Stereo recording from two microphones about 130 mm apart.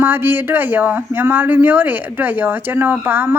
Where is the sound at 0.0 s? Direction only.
15° right (ahead or behind).